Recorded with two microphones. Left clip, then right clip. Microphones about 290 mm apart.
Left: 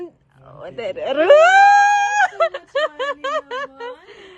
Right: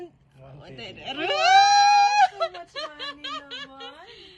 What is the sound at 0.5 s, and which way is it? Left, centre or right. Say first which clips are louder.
Speech: left 15 dB; centre.